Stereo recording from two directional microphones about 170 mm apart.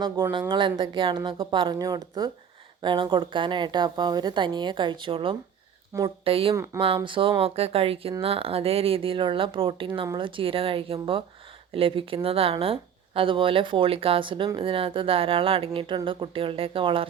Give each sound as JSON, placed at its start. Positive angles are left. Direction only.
{"t": 0.0, "sound": "a woman's voice", "side_deg": -25}